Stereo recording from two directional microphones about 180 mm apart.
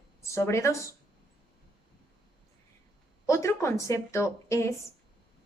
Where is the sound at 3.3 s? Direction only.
15° left (ahead or behind).